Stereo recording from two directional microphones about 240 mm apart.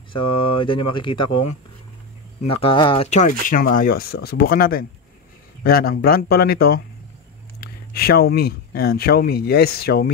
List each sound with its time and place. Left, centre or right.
0.1 s speech: left
2.5 s speech: left